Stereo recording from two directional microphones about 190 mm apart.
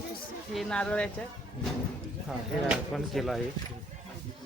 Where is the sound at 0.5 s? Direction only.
5° left (ahead or behind).